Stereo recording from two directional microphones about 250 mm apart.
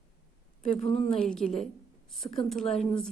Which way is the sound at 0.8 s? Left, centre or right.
Left.